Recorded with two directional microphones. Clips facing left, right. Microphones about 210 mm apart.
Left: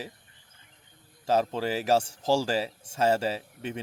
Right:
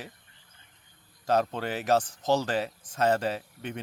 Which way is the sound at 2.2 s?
30° left (ahead or behind).